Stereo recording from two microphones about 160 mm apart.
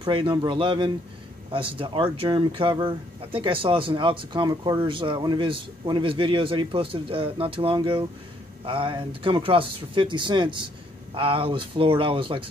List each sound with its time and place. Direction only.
0.0 s a man's voice: 30° right (ahead or behind)